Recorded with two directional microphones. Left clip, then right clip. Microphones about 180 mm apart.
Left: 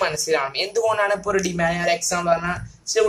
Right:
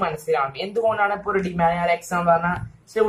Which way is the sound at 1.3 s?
55° left (ahead or behind).